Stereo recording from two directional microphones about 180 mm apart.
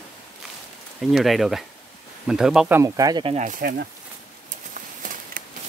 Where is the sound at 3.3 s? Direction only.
45° right (ahead or behind).